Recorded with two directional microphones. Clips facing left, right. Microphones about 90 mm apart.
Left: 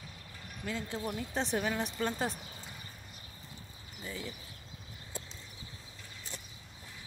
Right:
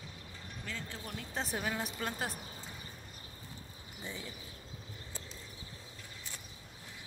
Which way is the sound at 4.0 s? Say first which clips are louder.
Left 2 dB; 20° right (ahead or behind).